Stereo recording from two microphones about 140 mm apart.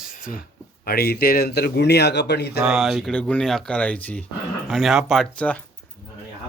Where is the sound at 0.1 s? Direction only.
75° left (ahead or behind).